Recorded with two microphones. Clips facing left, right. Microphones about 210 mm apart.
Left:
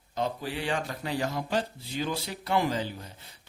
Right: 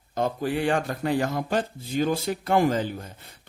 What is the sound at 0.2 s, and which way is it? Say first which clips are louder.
Speech: right 6 dB; 50° right (ahead or behind).